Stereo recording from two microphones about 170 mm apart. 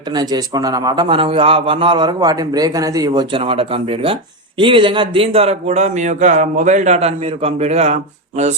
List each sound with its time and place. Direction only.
0.1 s a man's voice: 25° right (ahead or behind); by 7.9 s 40° right (ahead or behind)